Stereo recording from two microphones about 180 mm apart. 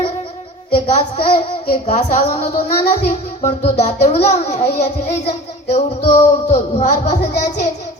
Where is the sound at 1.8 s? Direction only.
40° left (ahead or behind).